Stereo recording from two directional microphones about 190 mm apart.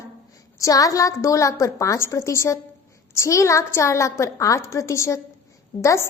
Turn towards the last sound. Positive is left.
turn(degrees=15)  # may be behind; listen again after turning